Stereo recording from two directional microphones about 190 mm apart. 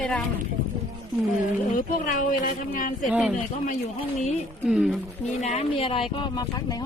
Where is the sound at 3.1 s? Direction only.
5° right (ahead or behind).